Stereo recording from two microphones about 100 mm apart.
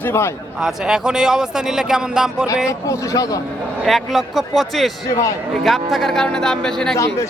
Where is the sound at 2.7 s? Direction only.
30° left (ahead or behind).